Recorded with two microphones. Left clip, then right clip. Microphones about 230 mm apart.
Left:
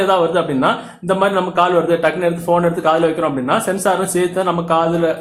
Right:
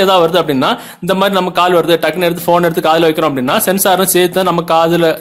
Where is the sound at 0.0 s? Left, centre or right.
Right.